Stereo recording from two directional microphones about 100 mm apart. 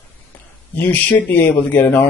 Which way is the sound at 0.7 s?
20° left (ahead or behind).